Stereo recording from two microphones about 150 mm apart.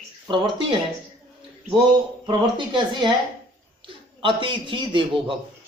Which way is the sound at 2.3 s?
30° right (ahead or behind).